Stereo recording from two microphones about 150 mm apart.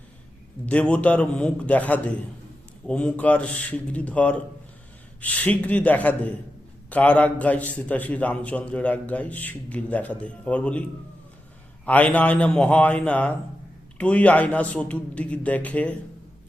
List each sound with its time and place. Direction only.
0.6 s a man's voice: 10° left (ahead or behind)
11.9 s a man's voice: 10° left (ahead or behind)